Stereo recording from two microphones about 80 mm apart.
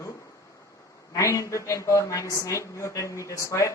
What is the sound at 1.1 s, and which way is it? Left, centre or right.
Speech, left.